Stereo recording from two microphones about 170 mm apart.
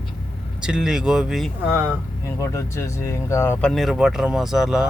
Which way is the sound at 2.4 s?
15° left (ahead or behind).